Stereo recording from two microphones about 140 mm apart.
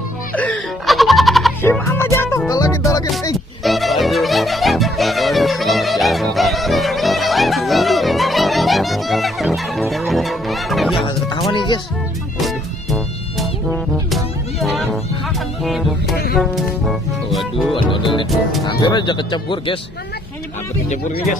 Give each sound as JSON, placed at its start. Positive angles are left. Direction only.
{"t": 0.8, "sound": "music", "side_deg": 0}
{"t": 1.6, "sound": "music", "side_deg": 15}
{"t": 3.6, "sound": "music", "side_deg": 0}
{"t": 11.5, "sound": "music", "side_deg": 35}
{"t": 12.4, "sound": "music", "side_deg": 0}
{"t": 17.8, "sound": "music", "side_deg": 35}
{"t": 18.7, "sound": "speech", "side_deg": 35}